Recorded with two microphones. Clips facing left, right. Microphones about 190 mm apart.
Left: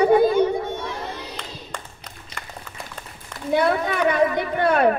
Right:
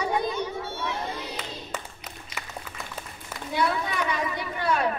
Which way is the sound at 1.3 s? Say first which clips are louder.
Even; 5° right (ahead or behind).